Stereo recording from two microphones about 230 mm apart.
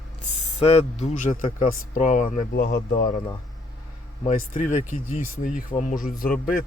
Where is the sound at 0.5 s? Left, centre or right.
Left.